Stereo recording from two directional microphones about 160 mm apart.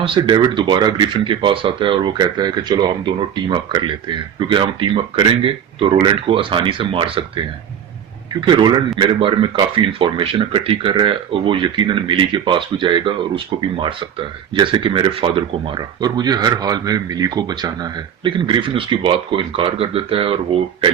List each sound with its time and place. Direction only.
0.0 s speech: 35° right (ahead or behind)
8.3 s speech: 30° right (ahead or behind)